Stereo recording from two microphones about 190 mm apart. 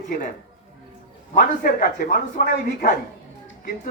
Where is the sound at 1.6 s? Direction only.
50° left (ahead or behind).